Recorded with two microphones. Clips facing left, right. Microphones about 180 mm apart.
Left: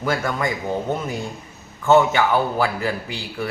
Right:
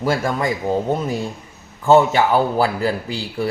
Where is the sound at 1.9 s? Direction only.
30° right (ahead or behind).